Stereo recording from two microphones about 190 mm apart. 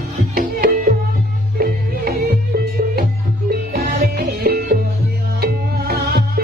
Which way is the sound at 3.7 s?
55° right (ahead or behind).